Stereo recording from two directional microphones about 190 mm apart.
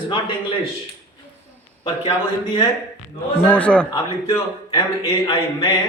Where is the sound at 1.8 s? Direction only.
25° left (ahead or behind).